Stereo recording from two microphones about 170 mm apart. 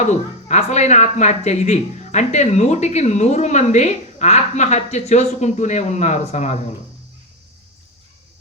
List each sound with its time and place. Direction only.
0.0 s speech: 40° left (ahead or behind)